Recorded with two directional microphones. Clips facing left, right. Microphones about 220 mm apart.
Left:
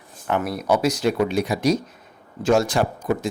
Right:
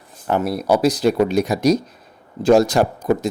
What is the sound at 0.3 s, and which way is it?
Speech, 35° right (ahead or behind).